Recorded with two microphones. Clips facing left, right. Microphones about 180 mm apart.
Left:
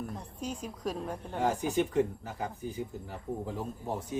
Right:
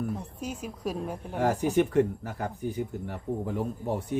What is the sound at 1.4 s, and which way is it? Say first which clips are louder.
Speech: right 5 dB; 65° right (ahead or behind).